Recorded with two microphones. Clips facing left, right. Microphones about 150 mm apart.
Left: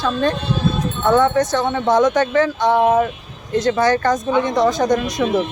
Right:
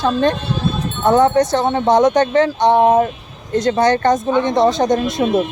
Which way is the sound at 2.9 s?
35° right (ahead or behind).